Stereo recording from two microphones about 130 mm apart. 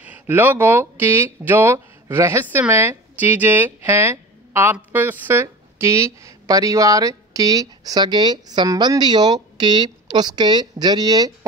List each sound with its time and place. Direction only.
0.0 s a woman's voice: 15° right (ahead or behind); by 11.3 s 30° right (ahead or behind)